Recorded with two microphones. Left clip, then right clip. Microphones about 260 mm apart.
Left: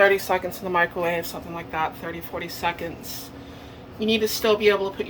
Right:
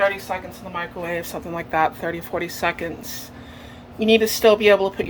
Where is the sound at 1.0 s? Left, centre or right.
Centre.